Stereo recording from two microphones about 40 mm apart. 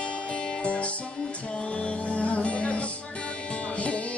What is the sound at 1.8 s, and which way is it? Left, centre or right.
Music, left.